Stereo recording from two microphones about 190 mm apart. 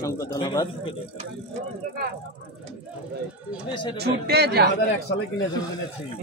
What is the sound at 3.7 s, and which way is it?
Speech, 25° left (ahead or behind).